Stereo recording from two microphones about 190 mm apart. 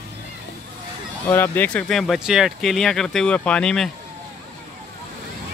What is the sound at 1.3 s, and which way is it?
Speech, 10° left (ahead or behind).